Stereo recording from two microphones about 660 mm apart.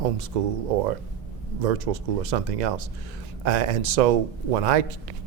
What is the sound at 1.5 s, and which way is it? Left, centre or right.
Speech, right.